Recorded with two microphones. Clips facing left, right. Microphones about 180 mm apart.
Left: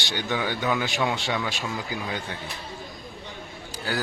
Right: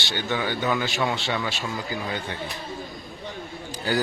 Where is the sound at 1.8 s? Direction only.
10° left (ahead or behind).